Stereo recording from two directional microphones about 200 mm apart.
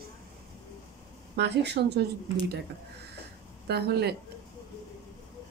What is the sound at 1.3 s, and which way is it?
Speech, 55° right (ahead or behind).